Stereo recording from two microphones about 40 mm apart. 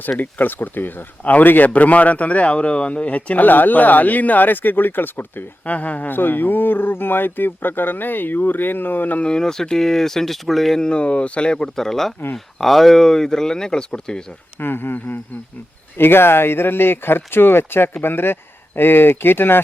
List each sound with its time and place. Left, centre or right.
0.2 s speech: left
1.2 s speech: left
1.5 s a man's voice: left
1.7 s a man's voice: left
5.6 s speech: left
6.1 s speech: left
9.2 s speech: centre
10.8 s speech: left
11.8 s speech: centre
14.6 s speech: left
14.9 s speech: left
16.0 s speech: left